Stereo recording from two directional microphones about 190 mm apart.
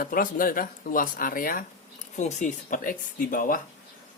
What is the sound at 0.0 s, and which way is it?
Speech, 45° left (ahead or behind).